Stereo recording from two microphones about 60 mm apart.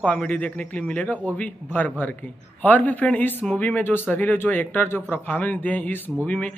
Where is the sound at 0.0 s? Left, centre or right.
Left.